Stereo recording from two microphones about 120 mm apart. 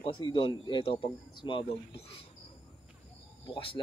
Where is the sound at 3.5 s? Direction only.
50° left (ahead or behind).